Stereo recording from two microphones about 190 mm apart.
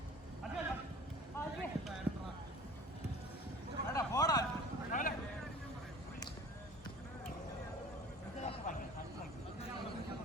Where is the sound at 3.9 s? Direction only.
20° left (ahead or behind).